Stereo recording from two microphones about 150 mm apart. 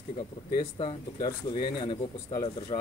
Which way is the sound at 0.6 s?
35° left (ahead or behind).